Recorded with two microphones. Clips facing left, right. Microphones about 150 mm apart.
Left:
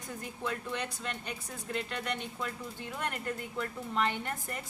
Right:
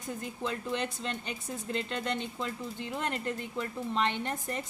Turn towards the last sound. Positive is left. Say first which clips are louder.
# right 3 dB
turn(degrees=-20)  # may be behind; listen again after turning